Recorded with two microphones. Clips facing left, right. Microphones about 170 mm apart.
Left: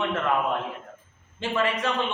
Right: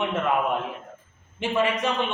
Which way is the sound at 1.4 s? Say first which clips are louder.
Right 2 dB; 15° right (ahead or behind).